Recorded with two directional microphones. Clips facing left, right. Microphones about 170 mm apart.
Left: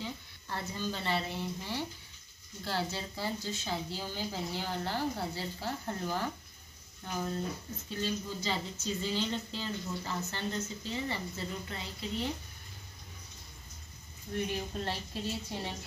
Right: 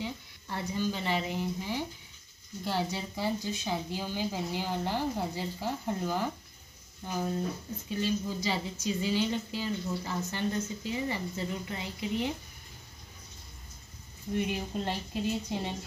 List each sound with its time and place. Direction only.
0.0 s speech: 15° right (ahead or behind)
14.3 s speech: 15° right (ahead or behind)